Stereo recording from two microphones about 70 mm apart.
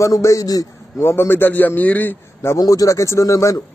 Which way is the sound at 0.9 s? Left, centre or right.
Left.